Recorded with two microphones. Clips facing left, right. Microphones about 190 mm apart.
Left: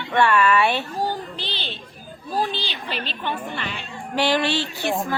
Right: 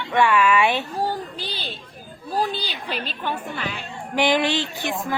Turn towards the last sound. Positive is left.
turn(degrees=-15)  # may be behind; listen again after turning